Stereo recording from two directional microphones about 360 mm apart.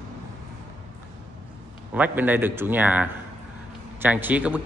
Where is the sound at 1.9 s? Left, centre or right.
Centre.